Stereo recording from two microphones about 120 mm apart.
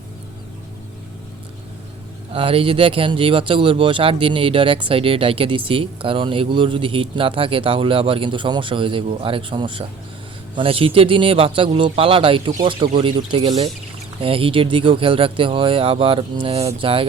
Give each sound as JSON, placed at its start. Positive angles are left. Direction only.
{"t": 2.3, "sound": "speech", "side_deg": -50}